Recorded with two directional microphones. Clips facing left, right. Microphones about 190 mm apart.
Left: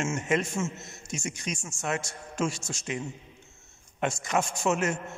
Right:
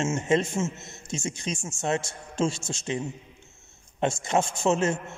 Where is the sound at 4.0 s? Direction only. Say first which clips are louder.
Right 3 dB; 25° right (ahead or behind).